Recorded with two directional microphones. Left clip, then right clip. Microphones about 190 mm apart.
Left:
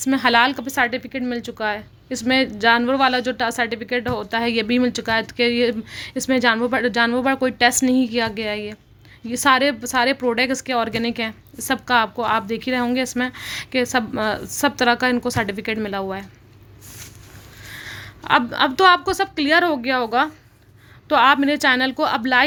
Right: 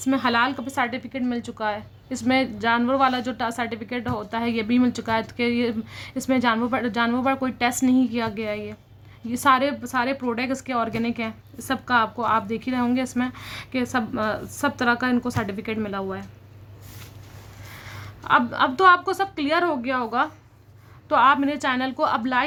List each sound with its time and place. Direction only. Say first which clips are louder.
0.0 s a woman's voice: left 5 dB; 15° left (ahead or behind)
17.7 s a woman's voice: left 7 dB; 15° left (ahead or behind)